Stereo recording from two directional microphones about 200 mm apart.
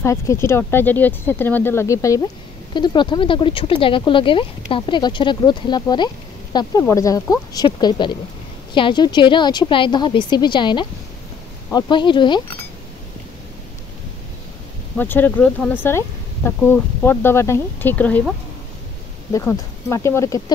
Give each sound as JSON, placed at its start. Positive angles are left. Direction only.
{"t": 0.0, "sound": "speech", "side_deg": 15}
{"t": 15.0, "sound": "speech", "side_deg": 10}
{"t": 19.3, "sound": "speech", "side_deg": 15}